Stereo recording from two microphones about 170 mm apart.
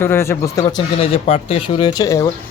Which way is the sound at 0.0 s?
15° left (ahead or behind).